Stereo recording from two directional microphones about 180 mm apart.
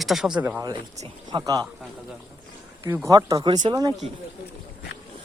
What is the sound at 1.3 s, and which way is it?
Speech, 20° right (ahead or behind).